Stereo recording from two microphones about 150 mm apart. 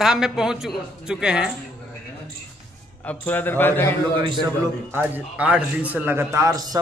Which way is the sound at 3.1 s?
10° left (ahead or behind).